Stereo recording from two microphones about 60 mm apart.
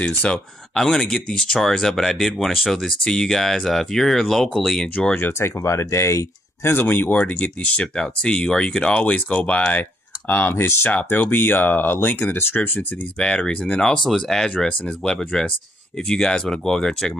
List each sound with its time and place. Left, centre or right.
0.0 s speech: centre
0.7 s speech: centre
3.0 s speech: centre
5.1 s speech: left
6.8 s speech: left
13.2 s speech: centre